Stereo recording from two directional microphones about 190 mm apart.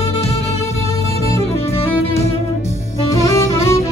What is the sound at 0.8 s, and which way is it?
Music, 15° left (ahead or behind).